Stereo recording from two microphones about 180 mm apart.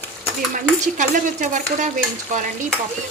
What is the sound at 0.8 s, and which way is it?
A woman's voice, 45° right (ahead or behind).